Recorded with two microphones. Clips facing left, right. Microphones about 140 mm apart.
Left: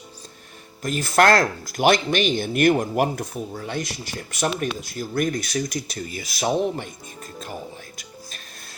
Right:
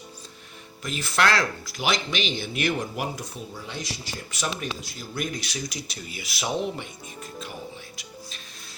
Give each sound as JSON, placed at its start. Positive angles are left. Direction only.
{"t": 0.8, "sound": "speech", "side_deg": 45}